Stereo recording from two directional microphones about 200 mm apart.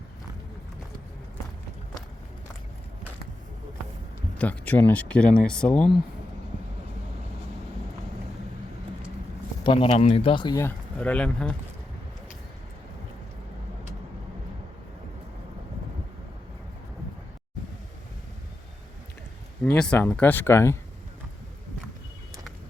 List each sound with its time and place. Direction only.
4.4 s speech: 10° left (ahead or behind)
9.6 s speech: 25° left (ahead or behind); by 11.5 s 5° left (ahead or behind)
19.6 s speech: 10° left (ahead or behind)